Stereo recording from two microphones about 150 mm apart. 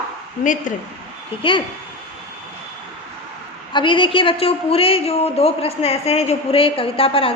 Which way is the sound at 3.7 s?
35° left (ahead or behind).